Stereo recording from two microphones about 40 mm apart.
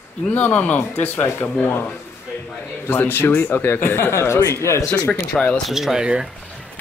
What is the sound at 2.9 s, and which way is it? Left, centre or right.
Speech, left.